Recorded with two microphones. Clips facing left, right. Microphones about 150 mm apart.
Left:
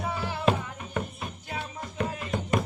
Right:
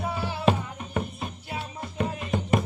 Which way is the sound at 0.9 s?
20° right (ahead or behind).